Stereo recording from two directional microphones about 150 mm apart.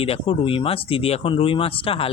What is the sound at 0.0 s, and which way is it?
Speech, 40° left (ahead or behind).